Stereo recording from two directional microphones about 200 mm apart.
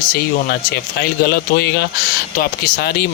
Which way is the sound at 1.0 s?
50° left (ahead or behind).